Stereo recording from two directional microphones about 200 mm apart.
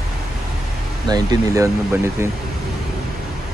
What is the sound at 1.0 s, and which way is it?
Speech, 20° right (ahead or behind).